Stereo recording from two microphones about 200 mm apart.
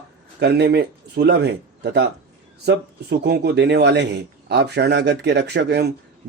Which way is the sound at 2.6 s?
55° right (ahead or behind).